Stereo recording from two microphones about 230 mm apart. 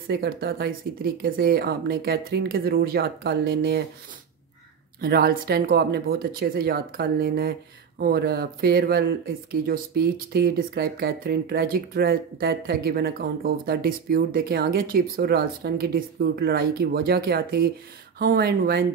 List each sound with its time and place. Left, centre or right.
0.1 s speech: right
5.0 s speech: right